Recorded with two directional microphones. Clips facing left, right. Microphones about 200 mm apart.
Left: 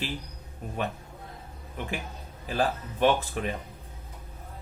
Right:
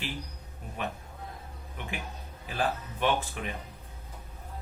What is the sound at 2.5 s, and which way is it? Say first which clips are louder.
Speech: left 4 dB; 40° left (ahead or behind).